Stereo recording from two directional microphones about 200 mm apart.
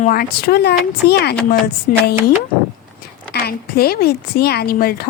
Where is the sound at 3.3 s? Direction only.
50° left (ahead or behind).